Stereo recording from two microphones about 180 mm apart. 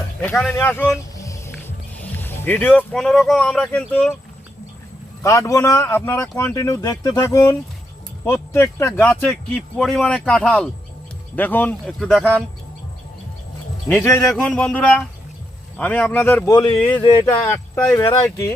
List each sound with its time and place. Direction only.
0.2 s speech: 5° left (ahead or behind)
5.2 s speech: 15° left (ahead or behind)
13.8 s speech: 10° left (ahead or behind)
16.6 s speech: 25° left (ahead or behind)
17.2 s speech: 10° left (ahead or behind)